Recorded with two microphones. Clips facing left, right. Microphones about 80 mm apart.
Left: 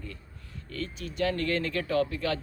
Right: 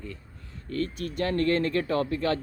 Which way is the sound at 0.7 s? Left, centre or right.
Right.